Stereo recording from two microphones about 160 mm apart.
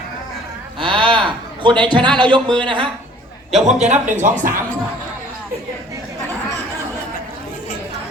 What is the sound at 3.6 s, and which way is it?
Speech, 45° right (ahead or behind).